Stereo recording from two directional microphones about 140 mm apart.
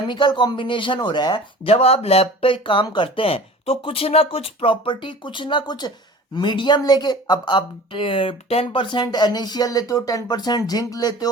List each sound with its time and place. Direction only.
0.1 s a woman's voice: 35° left (ahead or behind)
1.7 s a woman's voice: 45° left (ahead or behind); by 11.3 s 25° left (ahead or behind)